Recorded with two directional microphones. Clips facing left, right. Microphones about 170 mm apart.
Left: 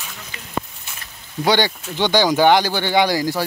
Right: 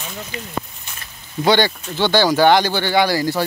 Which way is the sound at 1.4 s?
10° left (ahead or behind).